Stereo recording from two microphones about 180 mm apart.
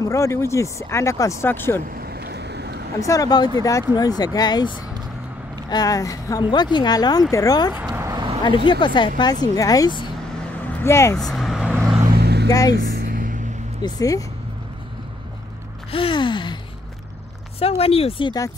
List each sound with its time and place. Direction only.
0.0 s speech: 15° left (ahead or behind)
1.9 s vehicle: 60° right (ahead or behind)
3.0 s speech: 20° left (ahead or behind)
7.7 s vehicle: 10° right (ahead or behind)
8.5 s speech: 25° left (ahead or behind)
10.7 s speech: 15° left (ahead or behind)
11.1 s vehicle: centre (ahead or behind)
12.1 s vehicle: 65° right (ahead or behind)
12.4 s speech: 20° left (ahead or behind)
12.7 s a sound: 60° right (ahead or behind)
13.8 s speech: 20° left (ahead or behind)
15.9 s gasp: 30° left (ahead or behind)
17.6 s speech: 35° left (ahead or behind)